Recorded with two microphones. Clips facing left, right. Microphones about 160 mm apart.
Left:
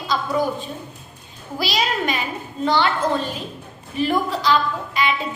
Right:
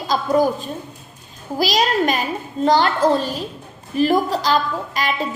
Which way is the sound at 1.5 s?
40° right (ahead or behind).